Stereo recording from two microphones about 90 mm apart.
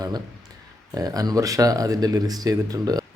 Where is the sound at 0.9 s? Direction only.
45° right (ahead or behind).